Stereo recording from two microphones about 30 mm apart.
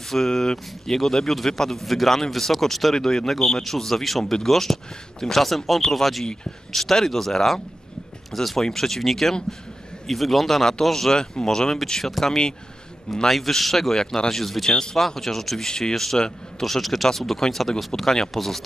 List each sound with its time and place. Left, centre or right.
0.3 s a man's voice: centre
11.3 s speech: left
12.0 s speech: centre
13.9 s speech: left
14.3 s speech: centre